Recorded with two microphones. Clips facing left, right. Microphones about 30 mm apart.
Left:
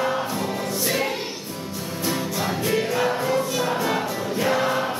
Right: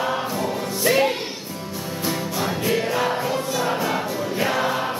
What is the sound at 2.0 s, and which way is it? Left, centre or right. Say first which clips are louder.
Music: even; centre.